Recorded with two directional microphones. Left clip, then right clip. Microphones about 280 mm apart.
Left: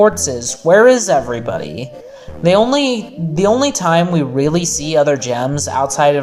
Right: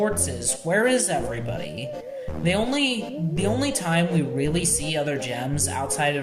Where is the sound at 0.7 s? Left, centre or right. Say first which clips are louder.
Left 14 dB; left.